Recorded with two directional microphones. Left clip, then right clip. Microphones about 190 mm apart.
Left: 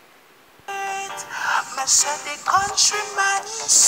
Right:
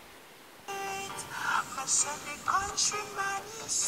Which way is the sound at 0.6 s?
45° left (ahead or behind).